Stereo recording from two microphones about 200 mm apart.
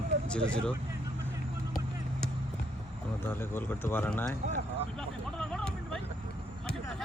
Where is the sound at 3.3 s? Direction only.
10° left (ahead or behind).